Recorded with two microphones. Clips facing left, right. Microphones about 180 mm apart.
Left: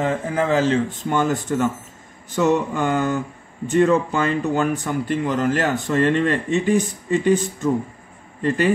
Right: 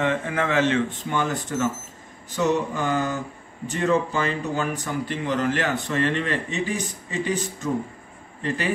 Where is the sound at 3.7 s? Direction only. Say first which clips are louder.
Left 6 dB; 50° left (ahead or behind).